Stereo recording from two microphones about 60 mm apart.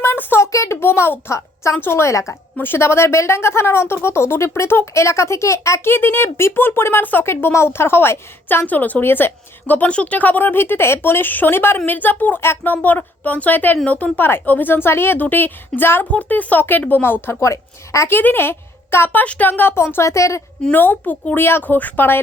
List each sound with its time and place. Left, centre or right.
0.0 s a sound: left
0.3 s a child's voice: left
1.3 s a woman's voice: left
5.8 s a woman's voice: left
7.3 s a woman's voice: left
8.6 s a woman's voice: left
16.1 s a woman's voice: left
17.5 s a woman's voice: left
18.1 s speech: left
19.2 s a woman's voice: left
20.7 s a woman's voice: left